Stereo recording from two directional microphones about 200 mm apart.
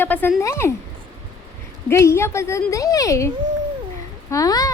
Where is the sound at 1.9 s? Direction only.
15° left (ahead or behind).